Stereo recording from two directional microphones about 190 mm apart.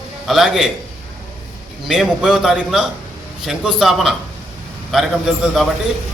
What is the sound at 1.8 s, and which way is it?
A man's voice, centre (ahead or behind).